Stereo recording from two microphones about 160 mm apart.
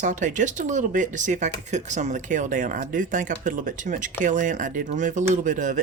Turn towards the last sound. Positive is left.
turn(degrees=-55)  # may be behind; listen again after turning